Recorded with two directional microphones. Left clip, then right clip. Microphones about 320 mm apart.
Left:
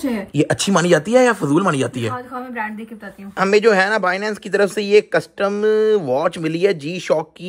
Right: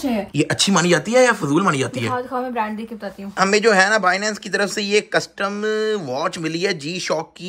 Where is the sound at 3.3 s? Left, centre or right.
Centre.